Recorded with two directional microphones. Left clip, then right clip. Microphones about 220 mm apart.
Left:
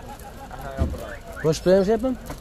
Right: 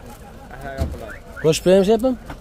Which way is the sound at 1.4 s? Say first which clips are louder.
Right 4 dB; 25° right (ahead or behind).